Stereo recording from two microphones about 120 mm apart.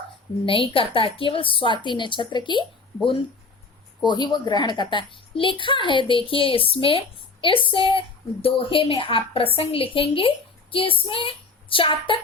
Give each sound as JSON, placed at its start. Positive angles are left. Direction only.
{"t": 0.4, "sound": "a child's voice", "side_deg": 45}
{"t": 4.0, "sound": "a child's voice", "side_deg": 40}